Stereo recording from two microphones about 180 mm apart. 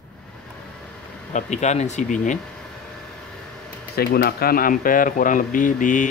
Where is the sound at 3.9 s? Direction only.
60° left (ahead or behind).